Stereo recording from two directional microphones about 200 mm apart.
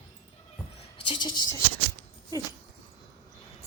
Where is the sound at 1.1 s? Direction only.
20° left (ahead or behind).